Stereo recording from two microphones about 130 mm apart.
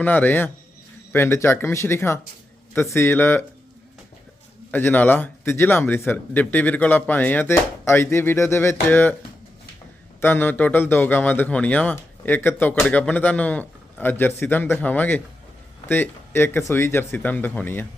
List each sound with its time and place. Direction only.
0.0 s a man's voice: 15° left (ahead or behind)
4.7 s a man's voice: 15° left (ahead or behind)
10.2 s a man's voice: 15° left (ahead or behind)